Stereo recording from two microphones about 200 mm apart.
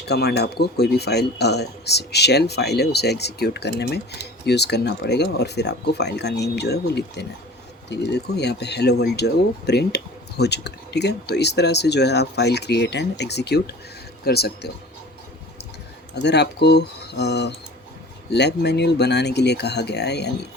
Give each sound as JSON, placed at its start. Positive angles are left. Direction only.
{"t": 0.1, "sound": "speech", "side_deg": 55}
{"t": 16.2, "sound": "speech", "side_deg": 55}